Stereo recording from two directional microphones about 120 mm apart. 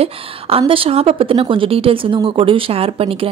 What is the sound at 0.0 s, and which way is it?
A woman's voice, 50° right (ahead or behind).